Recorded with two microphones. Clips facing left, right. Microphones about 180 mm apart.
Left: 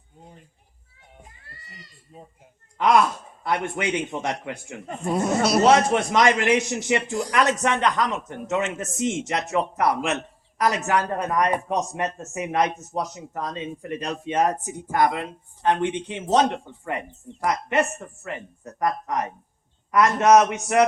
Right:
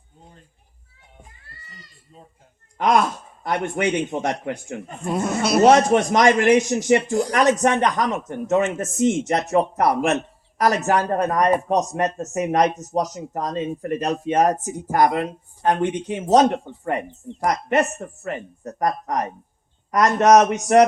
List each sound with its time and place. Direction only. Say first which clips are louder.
2.7 s a man's voice: even; 45° right (ahead or behind)
5.0 s speech: even; centre (ahead or behind)
5.6 s a man's voice: right 6 dB; 45° right (ahead or behind)
7.8 s speech: right 2 dB; 15° right (ahead or behind)
8.4 s a man's voice: right 6 dB; 50° right (ahead or behind)
17.4 s speech: right 3 dB; 40° right (ahead or behind)